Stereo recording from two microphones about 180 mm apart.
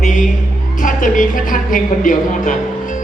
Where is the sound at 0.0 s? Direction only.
45° left (ahead or behind).